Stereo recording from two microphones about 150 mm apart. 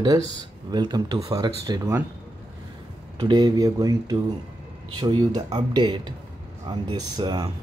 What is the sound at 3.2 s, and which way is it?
Speech, 30° right (ahead or behind).